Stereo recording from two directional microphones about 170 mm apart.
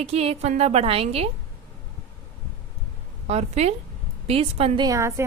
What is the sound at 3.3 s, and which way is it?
A woman's voice, 40° right (ahead or behind).